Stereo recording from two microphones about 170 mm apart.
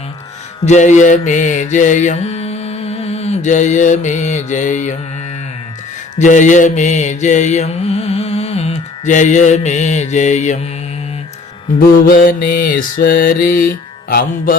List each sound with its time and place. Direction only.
0.6 s mantra: 45° left (ahead or behind)
6.1 s mantra: 45° left (ahead or behind)
11.8 s mantra: 55° left (ahead or behind)